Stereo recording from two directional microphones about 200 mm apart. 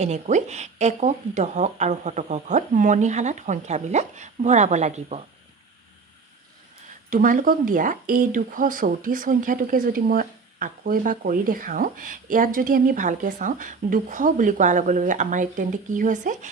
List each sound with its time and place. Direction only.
0.0 s speech: 35° right (ahead or behind)
7.1 s speech: 45° right (ahead or behind)